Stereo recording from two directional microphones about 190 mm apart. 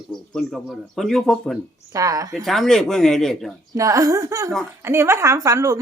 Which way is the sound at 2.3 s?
Centre (ahead or behind).